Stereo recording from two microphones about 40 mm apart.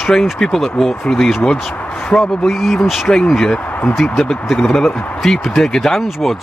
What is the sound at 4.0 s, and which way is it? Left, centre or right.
Speech, centre.